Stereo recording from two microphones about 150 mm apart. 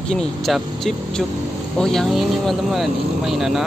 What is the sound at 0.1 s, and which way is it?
Speech, 5° left (ahead or behind).